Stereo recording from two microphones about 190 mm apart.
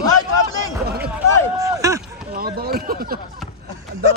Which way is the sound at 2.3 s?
50° right (ahead or behind).